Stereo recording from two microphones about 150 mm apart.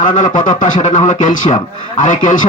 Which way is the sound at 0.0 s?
60° left (ahead or behind).